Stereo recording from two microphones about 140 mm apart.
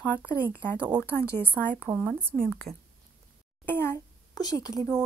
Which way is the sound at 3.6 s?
15° left (ahead or behind).